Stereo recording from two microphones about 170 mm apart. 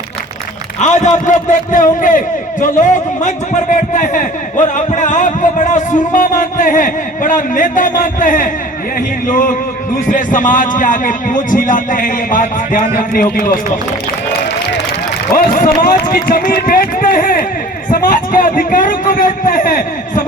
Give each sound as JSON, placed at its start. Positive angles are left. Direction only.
{"t": 0.8, "sound": "a man's voice", "side_deg": 45}
{"t": 15.4, "sound": "a man's voice", "side_deg": 50}